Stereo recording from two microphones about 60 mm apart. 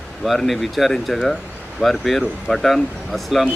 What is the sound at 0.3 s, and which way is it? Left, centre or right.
Speech, centre.